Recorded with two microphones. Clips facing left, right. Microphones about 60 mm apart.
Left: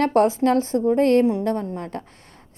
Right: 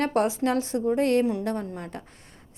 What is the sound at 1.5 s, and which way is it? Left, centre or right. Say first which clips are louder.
Speech: left 5 dB; left.